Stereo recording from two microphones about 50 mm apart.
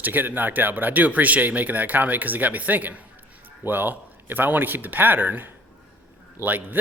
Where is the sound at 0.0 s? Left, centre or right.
Right.